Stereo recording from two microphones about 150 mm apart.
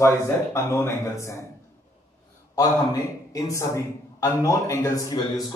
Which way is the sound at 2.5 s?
25° left (ahead or behind).